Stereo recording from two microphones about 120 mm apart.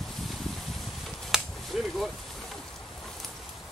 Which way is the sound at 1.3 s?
5° right (ahead or behind).